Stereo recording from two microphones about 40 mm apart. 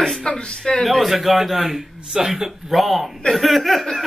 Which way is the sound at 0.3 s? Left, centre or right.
Left.